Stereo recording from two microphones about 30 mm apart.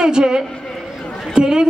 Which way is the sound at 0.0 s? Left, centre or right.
Right.